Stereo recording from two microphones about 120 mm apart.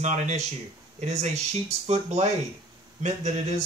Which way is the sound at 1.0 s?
70° right (ahead or behind).